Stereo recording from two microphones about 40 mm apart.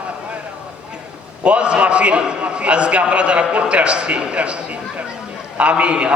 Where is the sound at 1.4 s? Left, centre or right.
Right.